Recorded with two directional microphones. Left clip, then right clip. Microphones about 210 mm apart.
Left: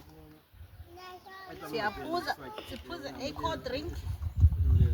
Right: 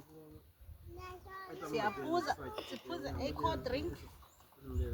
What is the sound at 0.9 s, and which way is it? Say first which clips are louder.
Speech: left 2 dB; 30° left (ahead or behind).